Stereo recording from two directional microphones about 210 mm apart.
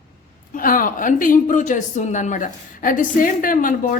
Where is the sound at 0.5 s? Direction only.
40° left (ahead or behind).